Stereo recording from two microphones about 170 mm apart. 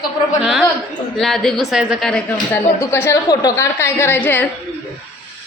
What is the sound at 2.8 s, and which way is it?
A woman's voice, 15° left (ahead or behind).